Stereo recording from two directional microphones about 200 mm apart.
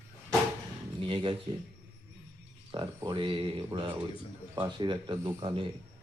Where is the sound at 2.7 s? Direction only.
25° right (ahead or behind).